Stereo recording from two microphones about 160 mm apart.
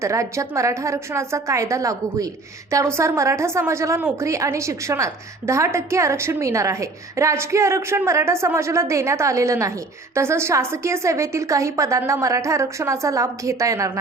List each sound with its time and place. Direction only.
0.0 s a woman's voice: 20° right (ahead or behind)